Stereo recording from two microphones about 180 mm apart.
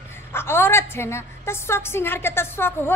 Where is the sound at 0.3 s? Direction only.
15° left (ahead or behind).